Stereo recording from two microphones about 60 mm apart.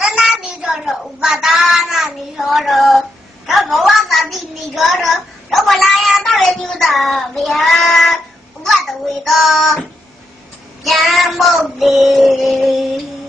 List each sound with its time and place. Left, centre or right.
0.0 s child singing: centre
8.6 s a child's voice: centre
10.8 s child singing: centre